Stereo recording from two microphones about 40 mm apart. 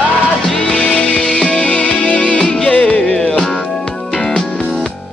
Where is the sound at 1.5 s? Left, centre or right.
Left.